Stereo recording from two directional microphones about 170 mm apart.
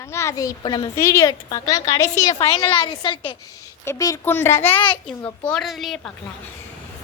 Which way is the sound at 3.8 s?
15° left (ahead or behind).